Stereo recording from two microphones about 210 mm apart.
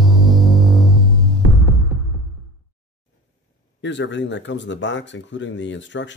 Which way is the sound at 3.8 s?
60° left (ahead or behind).